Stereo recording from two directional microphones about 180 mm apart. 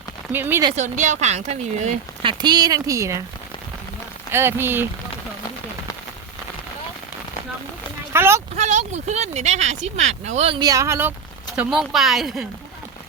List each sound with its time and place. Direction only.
0.3 s speech: 10° right (ahead or behind)
0.8 s speech: 45° right (ahead or behind)
2.2 s speech: 25° right (ahead or behind)
4.3 s speech: 15° right (ahead or behind)
8.1 s speech: 15° right (ahead or behind)
8.5 s speech: 40° right (ahead or behind)
10.6 s speech: 20° right (ahead or behind)
11.5 s speech: 5° right (ahead or behind)